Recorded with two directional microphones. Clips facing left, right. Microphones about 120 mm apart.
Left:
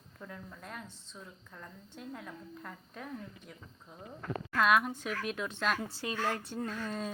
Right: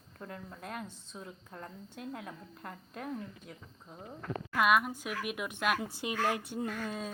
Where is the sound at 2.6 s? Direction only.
50° right (ahead or behind).